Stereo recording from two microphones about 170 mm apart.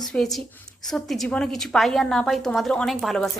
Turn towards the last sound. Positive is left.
turn(degrees=0)  # may be behind; listen again after turning